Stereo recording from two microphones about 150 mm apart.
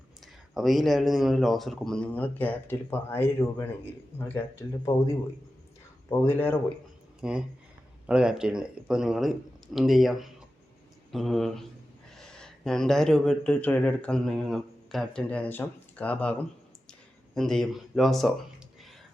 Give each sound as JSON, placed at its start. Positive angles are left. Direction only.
{"t": 0.5, "sound": "a man's voice", "side_deg": 0}
{"t": 6.1, "sound": "speech", "side_deg": 15}
{"t": 7.2, "sound": "speech", "side_deg": -5}
{"t": 17.3, "sound": "speech", "side_deg": 5}